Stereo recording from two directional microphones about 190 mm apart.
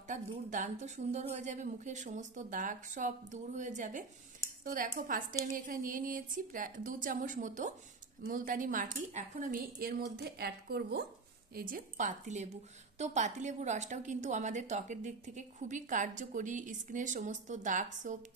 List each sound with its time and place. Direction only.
0.5 s a woman's voice: 40° right (ahead or behind); by 11.1 s 60° right (ahead or behind)
11.5 s a woman's voice: 45° right (ahead or behind)